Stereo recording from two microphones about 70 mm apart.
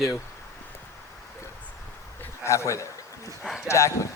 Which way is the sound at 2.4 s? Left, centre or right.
Left.